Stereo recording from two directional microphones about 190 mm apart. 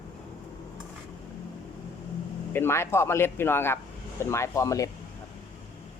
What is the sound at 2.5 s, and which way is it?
A man's voice, 10° left (ahead or behind).